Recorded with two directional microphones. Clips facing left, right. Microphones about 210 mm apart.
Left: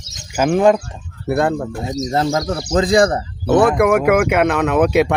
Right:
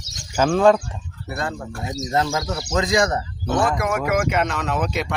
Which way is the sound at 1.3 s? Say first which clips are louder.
Left 11 dB; 55° left (ahead or behind).